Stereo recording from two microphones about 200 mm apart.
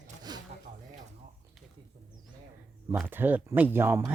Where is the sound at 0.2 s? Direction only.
20° right (ahead or behind).